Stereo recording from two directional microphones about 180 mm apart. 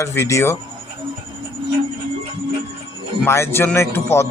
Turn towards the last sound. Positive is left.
turn(degrees=15)  # may be behind; listen again after turning